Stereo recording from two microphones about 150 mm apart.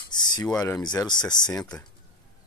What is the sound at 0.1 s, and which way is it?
Speech, 30° left (ahead or behind).